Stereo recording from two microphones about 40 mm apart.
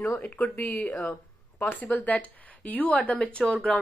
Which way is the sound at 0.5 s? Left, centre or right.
Left.